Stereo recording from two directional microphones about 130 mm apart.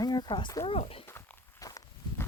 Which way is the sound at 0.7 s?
45° left (ahead or behind).